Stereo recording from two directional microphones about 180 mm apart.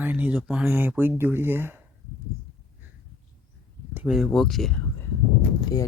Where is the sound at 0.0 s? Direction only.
10° right (ahead or behind).